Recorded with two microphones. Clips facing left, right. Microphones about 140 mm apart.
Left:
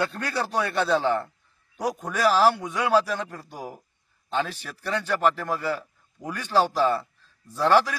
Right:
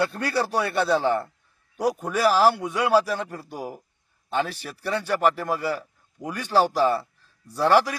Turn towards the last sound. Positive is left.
turn(degrees=-15)  # may be behind; listen again after turning